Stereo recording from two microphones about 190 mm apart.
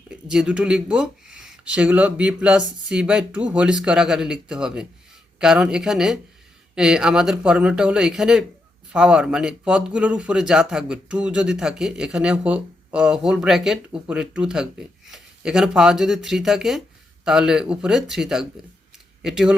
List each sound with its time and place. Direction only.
0.1 s speech: 5° right (ahead or behind)